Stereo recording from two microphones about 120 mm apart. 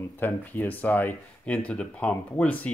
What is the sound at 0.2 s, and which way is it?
Speech, 15° left (ahead or behind).